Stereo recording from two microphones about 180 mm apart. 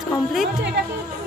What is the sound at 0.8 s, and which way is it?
Music, 70° right (ahead or behind).